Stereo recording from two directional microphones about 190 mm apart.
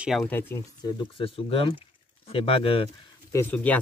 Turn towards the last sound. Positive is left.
turn(degrees=10)  # may be behind; listen again after turning